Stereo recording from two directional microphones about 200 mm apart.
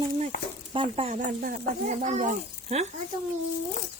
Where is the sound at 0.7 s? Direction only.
30° right (ahead or behind).